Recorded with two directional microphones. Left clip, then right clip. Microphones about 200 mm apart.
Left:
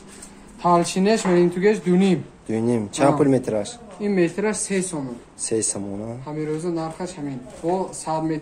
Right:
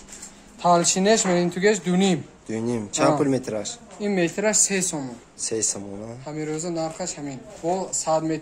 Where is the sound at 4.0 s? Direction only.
50° right (ahead or behind).